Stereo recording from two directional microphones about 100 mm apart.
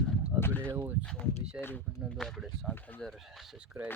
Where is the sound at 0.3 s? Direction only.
25° left (ahead or behind).